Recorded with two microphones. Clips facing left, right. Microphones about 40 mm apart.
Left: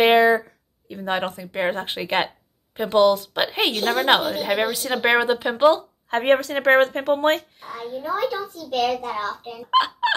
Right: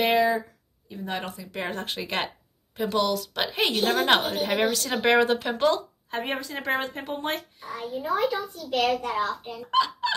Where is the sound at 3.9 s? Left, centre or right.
Centre.